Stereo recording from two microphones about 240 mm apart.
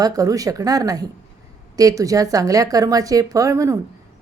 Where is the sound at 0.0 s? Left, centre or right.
Centre.